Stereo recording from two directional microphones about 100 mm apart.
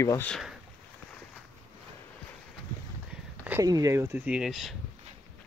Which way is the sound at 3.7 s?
35° right (ahead or behind).